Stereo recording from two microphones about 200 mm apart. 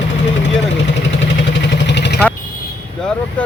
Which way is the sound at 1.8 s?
60° left (ahead or behind).